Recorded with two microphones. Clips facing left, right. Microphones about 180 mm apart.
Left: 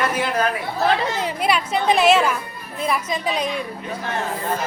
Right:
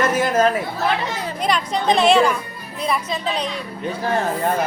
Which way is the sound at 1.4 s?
5° left (ahead or behind).